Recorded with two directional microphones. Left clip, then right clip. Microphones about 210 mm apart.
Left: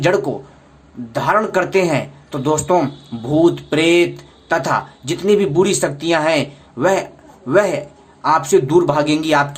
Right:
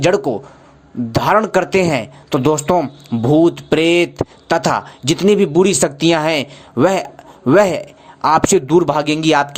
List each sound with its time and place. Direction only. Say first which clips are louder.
0.0 s speech: right 2 dB; 35° right (ahead or behind)